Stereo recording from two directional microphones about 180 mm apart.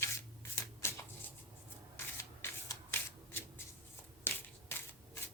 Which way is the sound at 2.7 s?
10° left (ahead or behind).